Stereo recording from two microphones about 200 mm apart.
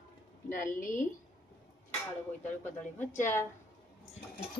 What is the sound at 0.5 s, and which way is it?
Speech, 40° left (ahead or behind).